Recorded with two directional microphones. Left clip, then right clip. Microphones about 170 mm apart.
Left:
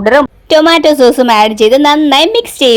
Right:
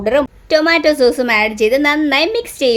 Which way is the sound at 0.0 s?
30° left (ahead or behind).